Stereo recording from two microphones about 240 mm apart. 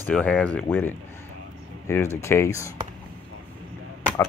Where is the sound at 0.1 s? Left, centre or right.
Centre.